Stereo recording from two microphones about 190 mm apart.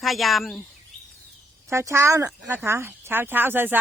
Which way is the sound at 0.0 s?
Centre (ahead or behind).